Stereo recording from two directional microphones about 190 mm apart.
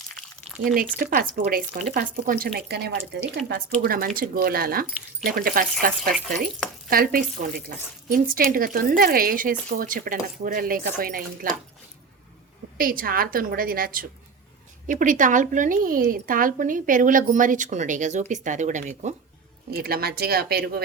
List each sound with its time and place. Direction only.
0.2 s a sound: centre (ahead or behind)
0.9 s speech: 50° right (ahead or behind)
3.8 s speech: 50° right (ahead or behind)
12.7 s speech: 50° right (ahead or behind)
19.7 s speech: 55° right (ahead or behind)